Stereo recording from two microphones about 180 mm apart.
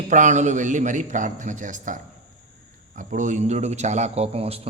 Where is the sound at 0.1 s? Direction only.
40° right (ahead or behind).